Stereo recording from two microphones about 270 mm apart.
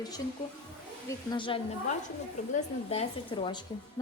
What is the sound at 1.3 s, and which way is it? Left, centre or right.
A woman's voice, centre.